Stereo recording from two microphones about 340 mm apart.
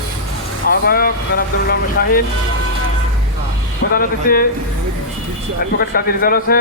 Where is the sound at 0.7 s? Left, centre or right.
Left.